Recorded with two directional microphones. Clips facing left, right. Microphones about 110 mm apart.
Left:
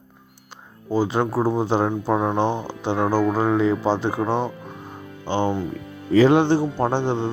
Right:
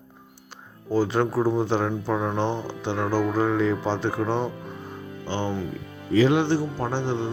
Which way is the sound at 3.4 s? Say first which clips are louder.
Left 3 dB; 15° left (ahead or behind).